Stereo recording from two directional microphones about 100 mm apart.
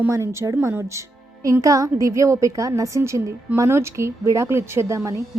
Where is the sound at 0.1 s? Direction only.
30° right (ahead or behind).